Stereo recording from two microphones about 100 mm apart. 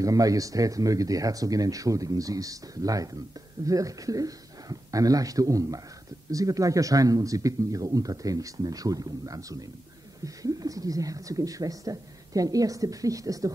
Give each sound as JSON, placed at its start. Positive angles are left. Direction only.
{"t": 0.0, "sound": "speech", "side_deg": -35}